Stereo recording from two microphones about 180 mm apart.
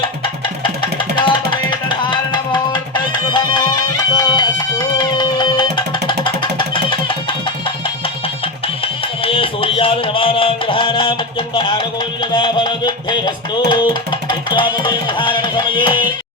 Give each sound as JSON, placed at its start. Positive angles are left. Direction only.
{"t": 0.6, "sound": "music", "side_deg": 25}
{"t": 9.2, "sound": "music", "side_deg": 30}